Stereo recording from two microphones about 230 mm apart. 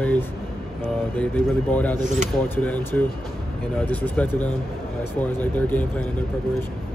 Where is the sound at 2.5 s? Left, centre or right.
Centre.